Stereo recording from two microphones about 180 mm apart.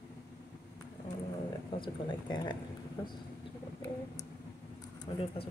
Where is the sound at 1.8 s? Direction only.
25° left (ahead or behind).